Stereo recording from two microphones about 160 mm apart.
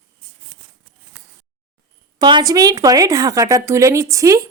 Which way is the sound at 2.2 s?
25° right (ahead or behind).